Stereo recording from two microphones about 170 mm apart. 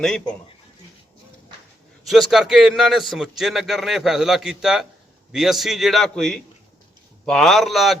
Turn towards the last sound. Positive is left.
turn(degrees=0)  # may be behind; listen again after turning